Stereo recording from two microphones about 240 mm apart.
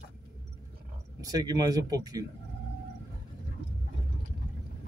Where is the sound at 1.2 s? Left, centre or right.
Centre.